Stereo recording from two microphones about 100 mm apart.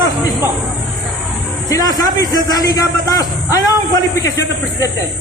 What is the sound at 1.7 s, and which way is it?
A man's voice, 40° left (ahead or behind).